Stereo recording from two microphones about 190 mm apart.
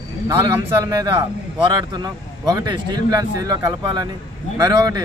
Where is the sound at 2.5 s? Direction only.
25° right (ahead or behind).